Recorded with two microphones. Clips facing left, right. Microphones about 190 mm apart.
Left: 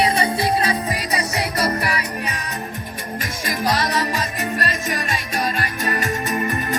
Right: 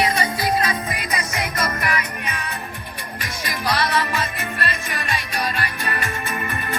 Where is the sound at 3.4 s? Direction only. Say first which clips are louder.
Left 2 dB; 45° left (ahead or behind).